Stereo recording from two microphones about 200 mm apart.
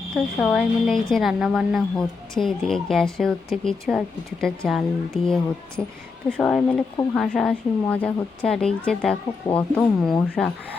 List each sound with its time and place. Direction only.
0.4 s a woman's voice: centre (ahead or behind)